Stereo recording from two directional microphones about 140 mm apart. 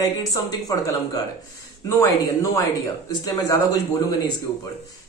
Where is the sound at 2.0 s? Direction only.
25° left (ahead or behind).